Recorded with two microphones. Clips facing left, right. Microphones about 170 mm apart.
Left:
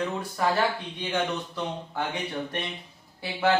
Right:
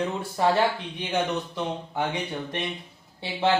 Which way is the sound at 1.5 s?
20° right (ahead or behind).